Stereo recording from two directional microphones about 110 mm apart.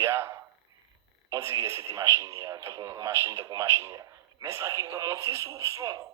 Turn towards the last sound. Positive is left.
turn(degrees=-25)  # may be behind; listen again after turning